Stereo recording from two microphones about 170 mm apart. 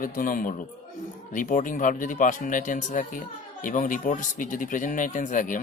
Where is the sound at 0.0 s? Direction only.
55° left (ahead or behind).